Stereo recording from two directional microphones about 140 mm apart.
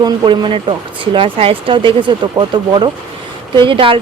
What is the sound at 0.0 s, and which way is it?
Speech, 35° right (ahead or behind).